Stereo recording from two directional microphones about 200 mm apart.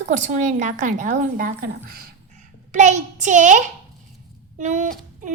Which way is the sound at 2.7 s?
35° right (ahead or behind).